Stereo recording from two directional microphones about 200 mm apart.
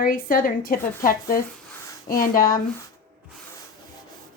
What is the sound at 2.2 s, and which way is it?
Speech, 45° left (ahead or behind).